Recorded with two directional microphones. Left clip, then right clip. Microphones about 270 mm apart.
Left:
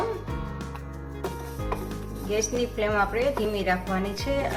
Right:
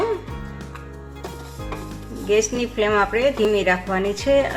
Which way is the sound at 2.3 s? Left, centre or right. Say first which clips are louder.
Right 7 dB; right.